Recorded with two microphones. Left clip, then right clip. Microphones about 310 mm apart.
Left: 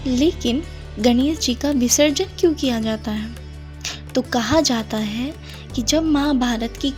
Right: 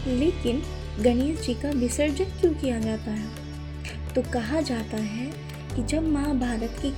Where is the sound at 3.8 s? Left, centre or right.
Left.